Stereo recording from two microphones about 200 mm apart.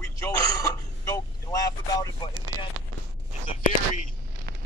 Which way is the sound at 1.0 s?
15° left (ahead or behind).